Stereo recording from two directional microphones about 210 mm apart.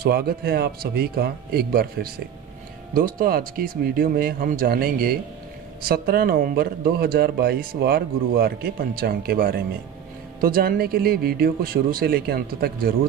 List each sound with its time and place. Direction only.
0.0 s a man's voice: 45° right (ahead or behind)